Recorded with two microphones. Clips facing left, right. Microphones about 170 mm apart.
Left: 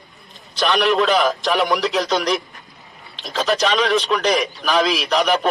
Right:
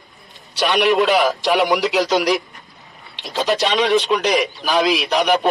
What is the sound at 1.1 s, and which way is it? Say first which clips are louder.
A man's voice: right 2 dB; centre (ahead or behind).